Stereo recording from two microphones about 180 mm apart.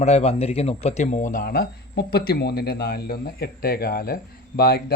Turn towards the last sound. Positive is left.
turn(degrees=60)  # may be behind; listen again after turning